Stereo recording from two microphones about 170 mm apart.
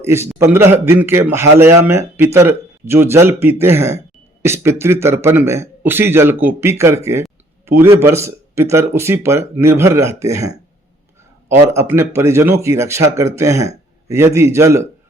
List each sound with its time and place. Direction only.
0.0 s speech: 15° right (ahead or behind)
11.7 s speech: 15° right (ahead or behind)